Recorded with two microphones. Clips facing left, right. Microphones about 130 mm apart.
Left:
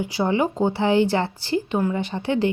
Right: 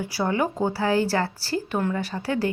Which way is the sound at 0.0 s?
20° left (ahead or behind).